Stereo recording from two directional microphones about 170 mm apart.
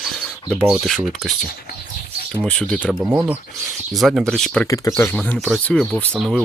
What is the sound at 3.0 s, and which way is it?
Speech, 15° right (ahead or behind).